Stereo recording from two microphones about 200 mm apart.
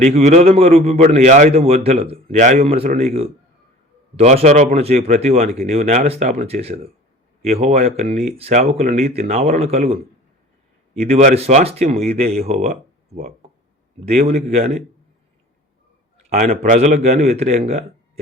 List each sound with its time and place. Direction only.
0.0 s speech: 35° right (ahead or behind)
14.0 s speech: 30° right (ahead or behind)
16.3 s speech: 35° right (ahead or behind)